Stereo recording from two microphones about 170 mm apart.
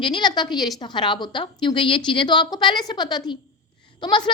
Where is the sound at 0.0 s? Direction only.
25° left (ahead or behind).